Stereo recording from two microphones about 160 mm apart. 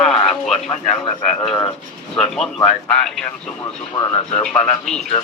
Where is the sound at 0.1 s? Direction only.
Centre (ahead or behind).